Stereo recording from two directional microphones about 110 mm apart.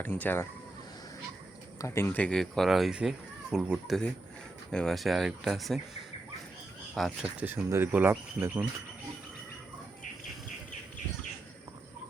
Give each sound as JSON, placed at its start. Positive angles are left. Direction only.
{"t": 0.0, "sound": "speech", "side_deg": 15}
{"t": 1.8, "sound": "speech", "side_deg": 25}
{"t": 7.3, "sound": "speech", "side_deg": -20}